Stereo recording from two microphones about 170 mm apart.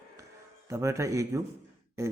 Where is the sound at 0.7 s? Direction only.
20° right (ahead or behind).